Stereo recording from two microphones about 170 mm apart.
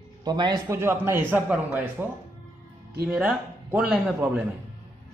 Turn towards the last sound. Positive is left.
turn(degrees=-5)  # may be behind; listen again after turning